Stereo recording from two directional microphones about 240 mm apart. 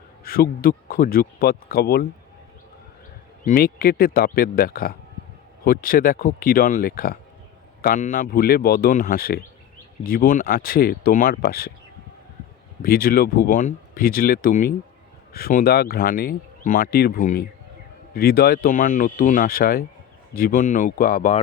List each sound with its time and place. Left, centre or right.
0.3 s speech: left
3.4 s speech: left
12.8 s speech: left